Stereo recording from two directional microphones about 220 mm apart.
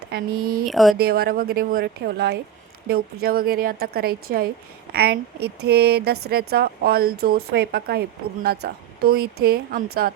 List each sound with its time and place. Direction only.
0.1 s speech: 40° right (ahead or behind)
0.6 s speech: centre (ahead or behind)
0.9 s a woman's voice: 45° right (ahead or behind)